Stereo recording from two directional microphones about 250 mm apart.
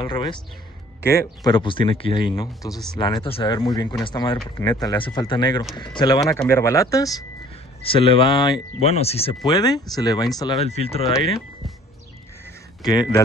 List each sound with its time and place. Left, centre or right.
0.0 s speech: centre
12.8 s speech: centre